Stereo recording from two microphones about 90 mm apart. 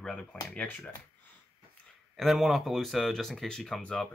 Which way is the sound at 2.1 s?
Centre (ahead or behind).